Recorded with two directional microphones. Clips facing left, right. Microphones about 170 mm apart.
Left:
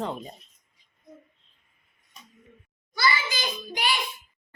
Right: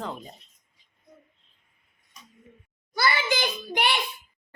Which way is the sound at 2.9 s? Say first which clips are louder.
Right 2 dB; 60° right (ahead or behind).